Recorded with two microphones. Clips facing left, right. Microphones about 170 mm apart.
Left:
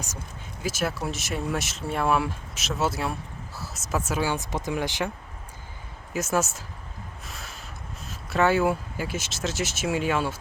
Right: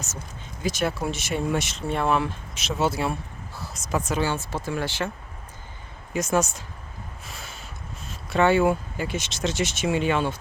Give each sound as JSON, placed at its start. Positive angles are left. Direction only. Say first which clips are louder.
{"t": 0.6, "sound": "speech", "louder": "right 3 dB", "side_deg": 5}
{"t": 6.1, "sound": "speech", "louder": "right 2 dB", "side_deg": 5}
{"t": 7.3, "sound": "a sound", "louder": "right 1 dB", "side_deg": 0}
{"t": 8.0, "sound": "speech", "louder": "right 2 dB", "side_deg": 0}